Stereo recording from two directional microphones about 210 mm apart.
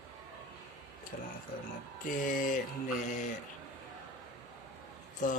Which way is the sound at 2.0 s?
40° left (ahead or behind).